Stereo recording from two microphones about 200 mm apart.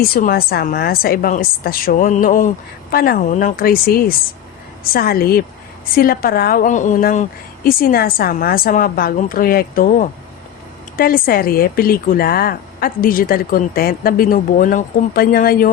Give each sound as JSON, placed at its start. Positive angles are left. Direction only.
{"t": 0.0, "sound": "speech", "side_deg": 45}